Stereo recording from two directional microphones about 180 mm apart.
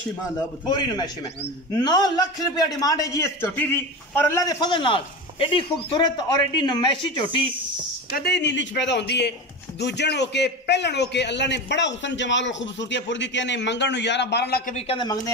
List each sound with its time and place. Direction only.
0.7 s a man's voice: 25° left (ahead or behind)
8.1 s a man's voice: 65° left (ahead or behind)
14.7 s speech: 35° left (ahead or behind)